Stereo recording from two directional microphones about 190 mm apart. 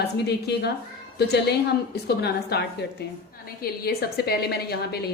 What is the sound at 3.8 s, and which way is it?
A woman's voice, 55° left (ahead or behind).